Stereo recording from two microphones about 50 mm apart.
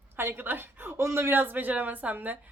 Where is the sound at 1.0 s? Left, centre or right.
Right.